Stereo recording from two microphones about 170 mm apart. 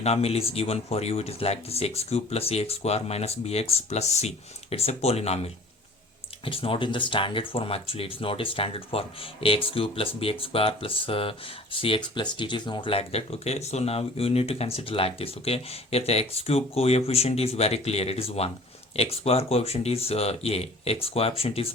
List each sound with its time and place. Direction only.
0.0 s speech: 35° left (ahead or behind)